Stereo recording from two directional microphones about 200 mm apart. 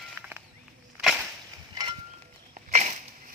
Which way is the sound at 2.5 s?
35° right (ahead or behind).